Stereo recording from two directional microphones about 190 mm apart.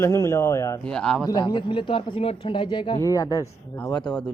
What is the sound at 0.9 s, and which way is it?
Speech, 5° left (ahead or behind).